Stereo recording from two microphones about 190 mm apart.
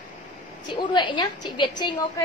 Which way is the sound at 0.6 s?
25° left (ahead or behind).